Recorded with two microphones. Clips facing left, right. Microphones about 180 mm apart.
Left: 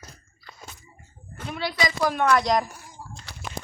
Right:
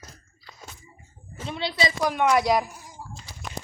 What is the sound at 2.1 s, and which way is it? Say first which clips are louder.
Speech: right 1 dB; 10° right (ahead or behind).